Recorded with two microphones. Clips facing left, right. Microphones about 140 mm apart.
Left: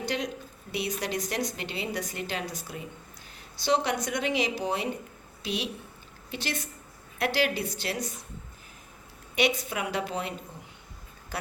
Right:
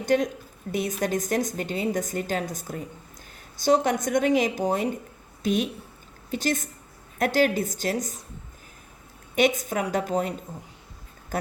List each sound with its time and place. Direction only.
0.0 s a woman's voice: 45° right (ahead or behind)
9.3 s a woman's voice: 45° right (ahead or behind)